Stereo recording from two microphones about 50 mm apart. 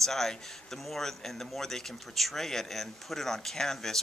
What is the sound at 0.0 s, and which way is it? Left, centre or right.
A man's voice, centre.